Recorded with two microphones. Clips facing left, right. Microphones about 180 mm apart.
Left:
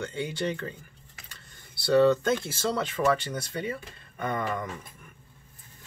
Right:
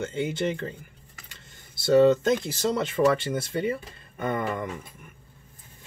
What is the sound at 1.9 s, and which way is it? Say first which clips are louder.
Speech: right 3 dB; 20° right (ahead or behind).